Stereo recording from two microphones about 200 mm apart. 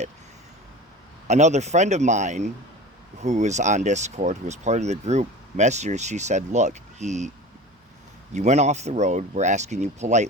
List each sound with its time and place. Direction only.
1.3 s speech: 35° right (ahead or behind)
8.3 s speech: 35° right (ahead or behind)